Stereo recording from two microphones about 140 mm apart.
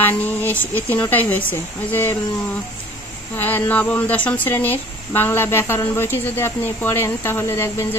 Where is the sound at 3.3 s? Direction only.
15° left (ahead or behind).